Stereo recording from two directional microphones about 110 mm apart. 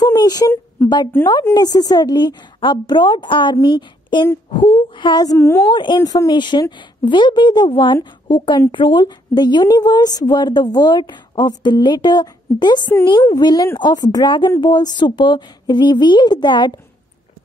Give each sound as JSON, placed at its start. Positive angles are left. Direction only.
{"t": 0.0, "sound": "a sound", "side_deg": 40}
{"t": 1.5, "sound": "a woman's voice", "side_deg": 35}
{"t": 5.4, "sound": "a woman's voice", "side_deg": 25}
{"t": 5.7, "sound": "speech", "side_deg": 45}
{"t": 5.9, "sound": "a woman's voice", "side_deg": 35}